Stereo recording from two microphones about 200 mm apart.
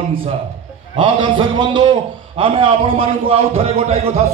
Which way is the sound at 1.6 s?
20° right (ahead or behind).